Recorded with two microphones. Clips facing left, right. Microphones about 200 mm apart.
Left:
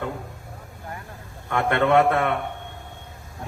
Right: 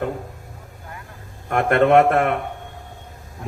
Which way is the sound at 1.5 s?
45° right (ahead or behind).